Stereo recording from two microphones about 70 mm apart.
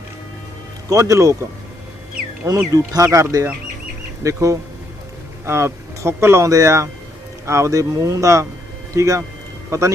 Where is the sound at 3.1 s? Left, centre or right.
Right.